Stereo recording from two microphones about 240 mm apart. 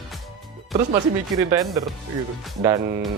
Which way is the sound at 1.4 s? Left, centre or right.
Centre.